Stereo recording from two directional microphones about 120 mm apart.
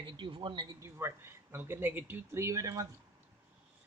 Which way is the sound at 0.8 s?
20° right (ahead or behind).